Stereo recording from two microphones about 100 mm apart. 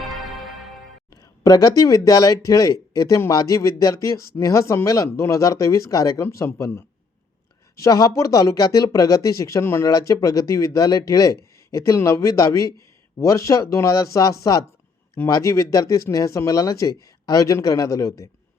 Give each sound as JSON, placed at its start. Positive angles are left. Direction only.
{"t": 0.0, "sound": "music", "side_deg": 0}
{"t": 1.1, "sound": "a sound", "side_deg": 40}
{"t": 2.0, "sound": "a man's voice", "side_deg": 35}
{"t": 7.8, "sound": "speech", "side_deg": 40}